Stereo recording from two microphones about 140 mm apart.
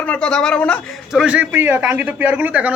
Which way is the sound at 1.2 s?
10° right (ahead or behind).